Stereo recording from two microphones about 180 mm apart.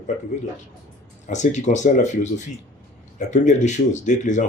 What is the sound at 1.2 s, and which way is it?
A man's voice, 40° left (ahead or behind).